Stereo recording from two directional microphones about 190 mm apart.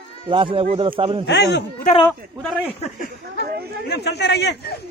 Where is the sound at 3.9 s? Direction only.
60° left (ahead or behind).